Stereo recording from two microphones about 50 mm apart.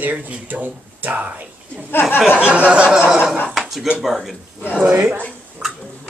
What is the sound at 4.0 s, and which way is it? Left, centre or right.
Speech, centre.